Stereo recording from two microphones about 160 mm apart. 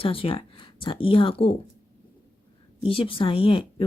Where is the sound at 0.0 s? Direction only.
35° left (ahead or behind).